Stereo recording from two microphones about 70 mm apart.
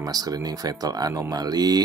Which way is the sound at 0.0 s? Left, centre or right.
Right.